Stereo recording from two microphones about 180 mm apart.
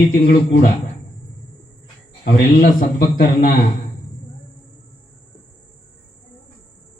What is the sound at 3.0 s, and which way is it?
Speech, 55° left (ahead or behind).